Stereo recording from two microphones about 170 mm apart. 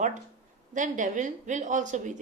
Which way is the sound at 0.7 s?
50° right (ahead or behind).